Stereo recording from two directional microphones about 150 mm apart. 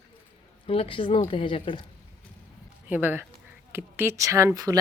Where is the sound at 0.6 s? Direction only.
40° left (ahead or behind).